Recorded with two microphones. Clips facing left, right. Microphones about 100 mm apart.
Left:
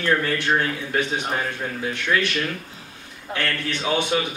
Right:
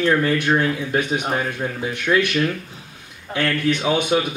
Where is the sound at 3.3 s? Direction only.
20° right (ahead or behind).